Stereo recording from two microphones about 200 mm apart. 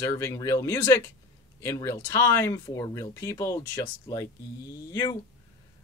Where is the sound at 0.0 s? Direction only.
15° left (ahead or behind).